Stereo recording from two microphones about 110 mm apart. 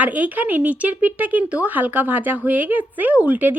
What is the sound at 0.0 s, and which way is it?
A woman's voice, 15° right (ahead or behind).